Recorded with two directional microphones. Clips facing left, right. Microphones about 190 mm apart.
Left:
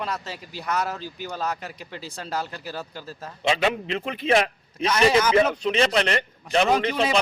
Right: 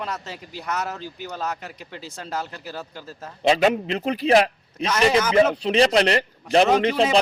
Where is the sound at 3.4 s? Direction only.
40° right (ahead or behind).